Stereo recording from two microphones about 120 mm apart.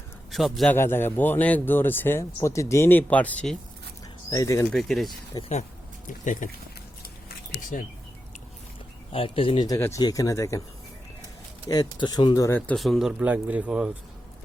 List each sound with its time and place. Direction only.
0.3 s a man's voice: centre (ahead or behind)
0.7 s speech: 20° left (ahead or behind)
4.3 s speech: 25° left (ahead or behind)
4.7 s speech: 5° left (ahead or behind)
5.4 s speech: 65° left (ahead or behind)
6.1 s speech: 90° left
9.1 s speech: 50° left (ahead or behind)
9.6 s speech: 25° left (ahead or behind)
11.7 s speech: 35° left (ahead or behind)
12.5 s speech: 15° left (ahead or behind)
12.7 s speech: centre (ahead or behind)